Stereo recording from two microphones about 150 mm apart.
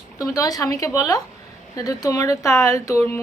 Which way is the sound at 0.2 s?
25° left (ahead or behind).